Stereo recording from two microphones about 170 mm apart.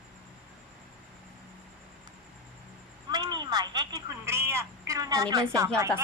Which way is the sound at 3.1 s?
25° right (ahead or behind).